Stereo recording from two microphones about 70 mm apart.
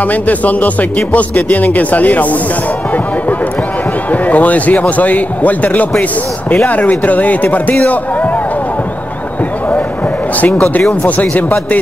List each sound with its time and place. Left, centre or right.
0.0 s speech: left
4.1 s speech: left
11.1 s speech: left